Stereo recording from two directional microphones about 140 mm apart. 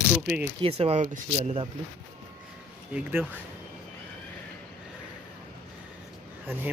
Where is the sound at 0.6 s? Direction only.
45° right (ahead or behind).